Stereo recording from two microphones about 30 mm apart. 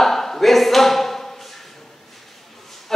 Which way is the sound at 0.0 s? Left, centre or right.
Centre.